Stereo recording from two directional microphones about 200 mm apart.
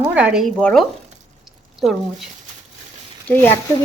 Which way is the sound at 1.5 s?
Centre (ahead or behind).